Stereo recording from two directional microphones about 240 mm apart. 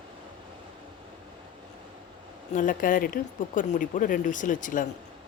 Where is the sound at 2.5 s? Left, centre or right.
Left.